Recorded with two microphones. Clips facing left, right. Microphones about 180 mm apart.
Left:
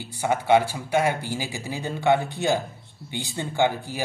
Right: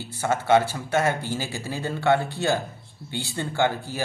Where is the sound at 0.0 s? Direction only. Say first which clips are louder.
Left 1 dB; 15° left (ahead or behind).